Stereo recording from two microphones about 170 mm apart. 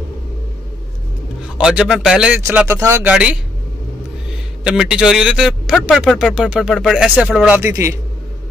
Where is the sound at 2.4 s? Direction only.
15° right (ahead or behind).